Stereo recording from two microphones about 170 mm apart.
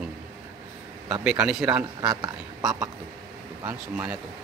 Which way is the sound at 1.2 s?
5° right (ahead or behind).